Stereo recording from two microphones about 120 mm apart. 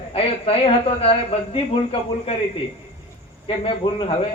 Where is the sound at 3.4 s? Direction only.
45° left (ahead or behind).